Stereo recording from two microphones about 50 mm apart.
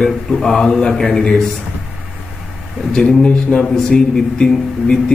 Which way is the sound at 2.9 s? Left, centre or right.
Centre.